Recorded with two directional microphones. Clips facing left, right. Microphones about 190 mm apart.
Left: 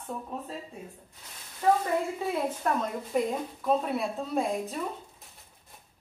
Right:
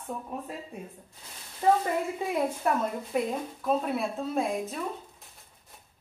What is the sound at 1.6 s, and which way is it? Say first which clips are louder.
Speech: right 1 dB; 25° right (ahead or behind).